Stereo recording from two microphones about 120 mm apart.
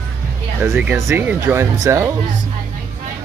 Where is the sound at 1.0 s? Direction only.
15° right (ahead or behind).